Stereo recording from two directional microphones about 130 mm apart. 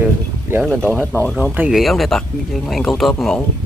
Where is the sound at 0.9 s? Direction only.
15° left (ahead or behind).